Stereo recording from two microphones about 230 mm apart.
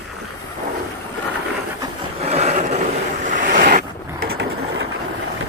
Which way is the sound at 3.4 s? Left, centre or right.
Right.